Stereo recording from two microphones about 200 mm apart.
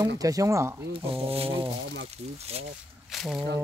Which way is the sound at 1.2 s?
30° right (ahead or behind).